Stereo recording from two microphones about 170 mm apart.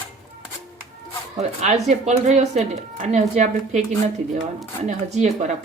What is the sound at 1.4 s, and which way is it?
Speech, 40° right (ahead or behind).